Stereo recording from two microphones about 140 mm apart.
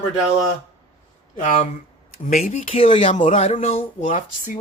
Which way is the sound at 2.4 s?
65° left (ahead or behind).